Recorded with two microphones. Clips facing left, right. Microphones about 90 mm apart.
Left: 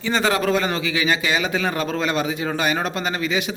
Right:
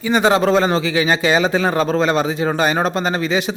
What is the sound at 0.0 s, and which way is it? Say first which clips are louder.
A man's voice: right 5 dB; 15° right (ahead or behind).